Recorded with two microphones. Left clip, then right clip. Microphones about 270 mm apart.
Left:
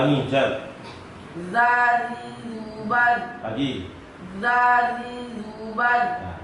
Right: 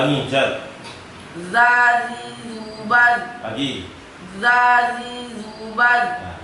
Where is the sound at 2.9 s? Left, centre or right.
Centre.